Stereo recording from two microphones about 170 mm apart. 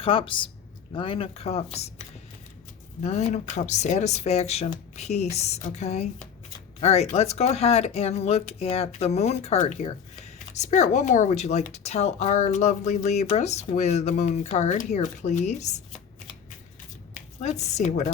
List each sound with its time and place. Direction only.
0.0 s speech: 30° left (ahead or behind)
3.0 s speech: 40° left (ahead or behind)
17.4 s speech: 40° left (ahead or behind)